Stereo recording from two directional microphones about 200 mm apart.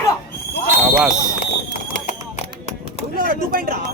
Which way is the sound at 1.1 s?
15° left (ahead or behind).